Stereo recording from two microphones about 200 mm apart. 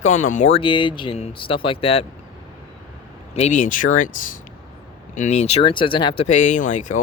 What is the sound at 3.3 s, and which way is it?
Speech, 35° left (ahead or behind).